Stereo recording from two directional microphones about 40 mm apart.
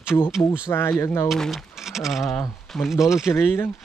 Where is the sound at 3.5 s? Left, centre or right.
Left.